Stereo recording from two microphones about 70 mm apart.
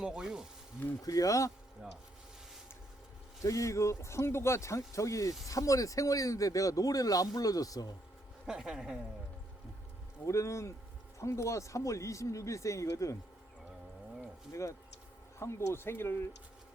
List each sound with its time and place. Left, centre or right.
0.0 s a woman's voice: centre
1.0 s speech: left
3.4 s speech: left
8.4 s a woman's voice: centre
10.2 s speech: left
14.5 s speech: left